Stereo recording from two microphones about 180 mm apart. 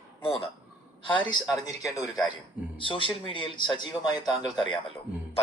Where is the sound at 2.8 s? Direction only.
30° left (ahead or behind).